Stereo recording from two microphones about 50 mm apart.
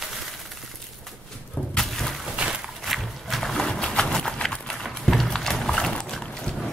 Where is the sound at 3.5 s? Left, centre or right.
Centre.